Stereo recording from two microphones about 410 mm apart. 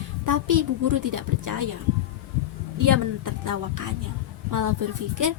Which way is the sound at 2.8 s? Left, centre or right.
Right.